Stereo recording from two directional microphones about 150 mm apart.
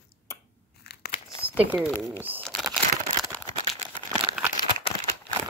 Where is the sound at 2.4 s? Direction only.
Centre (ahead or behind).